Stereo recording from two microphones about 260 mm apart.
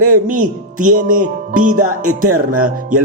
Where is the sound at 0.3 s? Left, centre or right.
Right.